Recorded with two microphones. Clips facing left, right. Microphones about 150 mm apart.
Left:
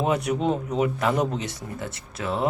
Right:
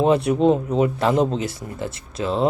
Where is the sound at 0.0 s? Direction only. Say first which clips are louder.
Right 7 dB; 30° right (ahead or behind).